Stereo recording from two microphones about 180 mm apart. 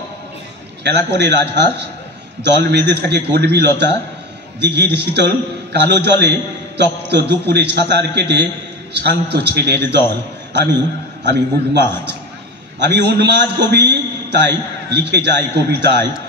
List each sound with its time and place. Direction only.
0.8 s a man's voice: 70° right (ahead or behind)
11.2 s a man's voice: 70° right (ahead or behind)
12.8 s a man's voice: 70° right (ahead or behind)